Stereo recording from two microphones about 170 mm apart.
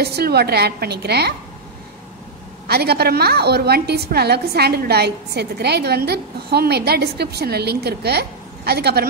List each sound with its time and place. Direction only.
0.0 s a woman's voice: 70° right (ahead or behind)
2.7 s a woman's voice: 70° right (ahead or behind)